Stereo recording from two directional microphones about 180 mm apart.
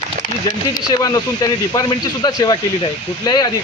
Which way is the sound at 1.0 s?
20° left (ahead or behind).